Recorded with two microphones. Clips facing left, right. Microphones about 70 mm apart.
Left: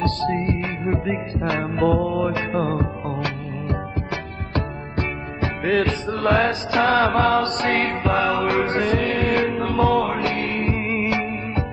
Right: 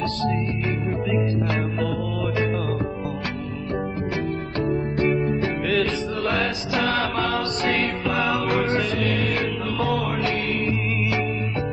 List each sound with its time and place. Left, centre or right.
0.0 s music: left
5.0 s music: left